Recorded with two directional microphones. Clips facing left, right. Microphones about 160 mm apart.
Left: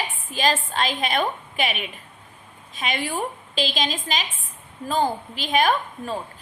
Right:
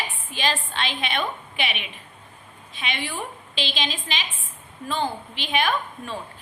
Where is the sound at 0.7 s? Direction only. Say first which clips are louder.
Left 4 dB; 40° left (ahead or behind).